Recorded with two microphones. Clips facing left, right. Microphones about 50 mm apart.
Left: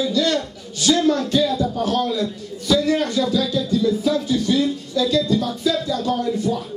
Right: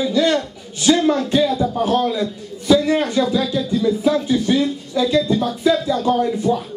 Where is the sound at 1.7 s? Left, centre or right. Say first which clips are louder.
Right 3 dB; right.